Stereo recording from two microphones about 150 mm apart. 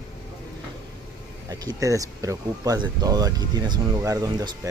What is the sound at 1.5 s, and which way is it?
Speech, 25° right (ahead or behind).